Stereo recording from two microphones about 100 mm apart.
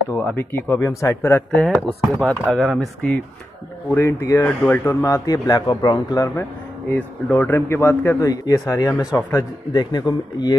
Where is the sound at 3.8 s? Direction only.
30° left (ahead or behind).